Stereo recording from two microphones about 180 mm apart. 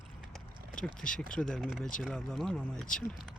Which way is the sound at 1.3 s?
5° left (ahead or behind).